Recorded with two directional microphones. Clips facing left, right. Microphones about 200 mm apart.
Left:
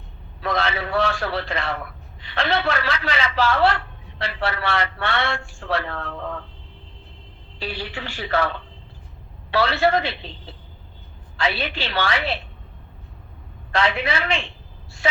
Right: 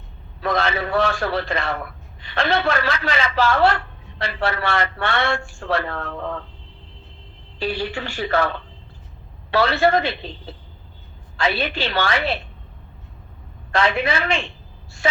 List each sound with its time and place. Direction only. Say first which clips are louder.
0.4 s a man's voice: right 2 dB; 45° right (ahead or behind)
7.6 s a man's voice: right 6 dB; 45° right (ahead or behind)
11.3 s a man's voice: right 3 dB; 45° right (ahead or behind)
13.7 s a man's voice: right 2 dB; 45° right (ahead or behind)